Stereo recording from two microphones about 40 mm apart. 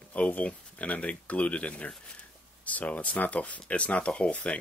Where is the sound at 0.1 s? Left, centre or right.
Left.